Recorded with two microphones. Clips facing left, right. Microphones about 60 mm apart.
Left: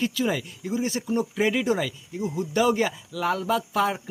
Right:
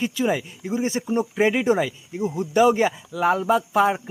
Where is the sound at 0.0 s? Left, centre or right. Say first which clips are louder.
Right 3 dB; right.